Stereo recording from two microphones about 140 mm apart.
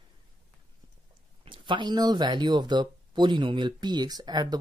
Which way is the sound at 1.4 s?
35° right (ahead or behind).